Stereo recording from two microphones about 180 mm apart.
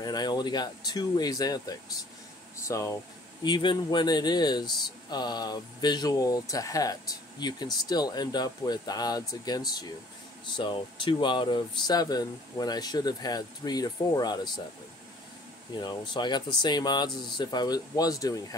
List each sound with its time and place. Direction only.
0.0 s speech: 20° left (ahead or behind)
15.8 s speech: 25° left (ahead or behind)